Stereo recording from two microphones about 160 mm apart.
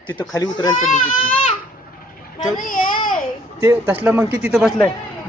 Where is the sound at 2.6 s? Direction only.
60° left (ahead or behind).